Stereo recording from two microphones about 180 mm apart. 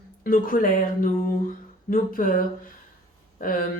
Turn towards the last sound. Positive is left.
turn(degrees=50)  # may be behind; listen again after turning